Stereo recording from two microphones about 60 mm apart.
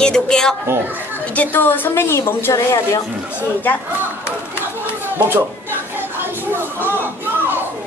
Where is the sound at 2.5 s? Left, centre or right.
Left.